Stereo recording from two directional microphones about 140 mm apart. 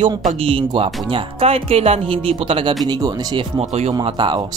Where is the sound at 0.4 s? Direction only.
40° right (ahead or behind).